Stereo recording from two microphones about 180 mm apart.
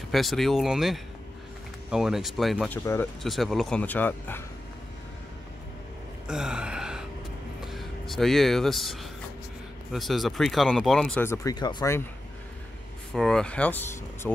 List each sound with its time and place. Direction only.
0.1 s speech: centre (ahead or behind)
2.7 s speech: 10° left (ahead or behind)
3.2 s speech: centre (ahead or behind)
6.2 s gasp: 5° right (ahead or behind)
7.6 s speech: centre (ahead or behind)
11.2 s speech: 20° left (ahead or behind)
13.1 s speech: 5° left (ahead or behind)